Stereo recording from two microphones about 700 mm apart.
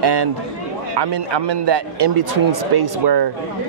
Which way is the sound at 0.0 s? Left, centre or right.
Right.